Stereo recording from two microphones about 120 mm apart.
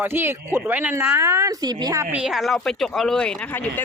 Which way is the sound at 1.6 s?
35° right (ahead or behind).